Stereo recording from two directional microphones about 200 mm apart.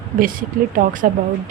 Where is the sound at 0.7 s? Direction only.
40° right (ahead or behind).